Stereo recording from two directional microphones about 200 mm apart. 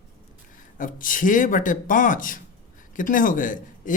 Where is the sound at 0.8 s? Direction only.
45° left (ahead or behind).